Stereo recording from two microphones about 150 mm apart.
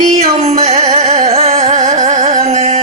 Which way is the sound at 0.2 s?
50° right (ahead or behind).